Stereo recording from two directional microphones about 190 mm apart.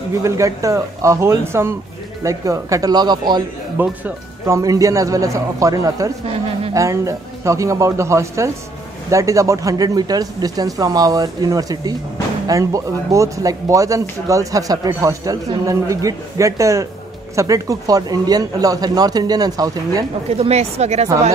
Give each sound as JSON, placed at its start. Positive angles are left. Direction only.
{"t": 0.2, "sound": "speech", "side_deg": -15}
{"t": 3.7, "sound": "speech", "side_deg": -10}
{"t": 20.2, "sound": "speech", "side_deg": -35}